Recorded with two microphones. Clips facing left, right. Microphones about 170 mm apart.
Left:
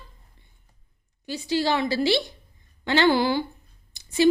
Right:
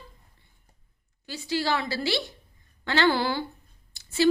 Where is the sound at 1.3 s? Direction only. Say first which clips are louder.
Left 3 dB; 20° left (ahead or behind).